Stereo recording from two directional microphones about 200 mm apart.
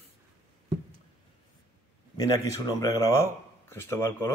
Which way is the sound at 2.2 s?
20° left (ahead or behind).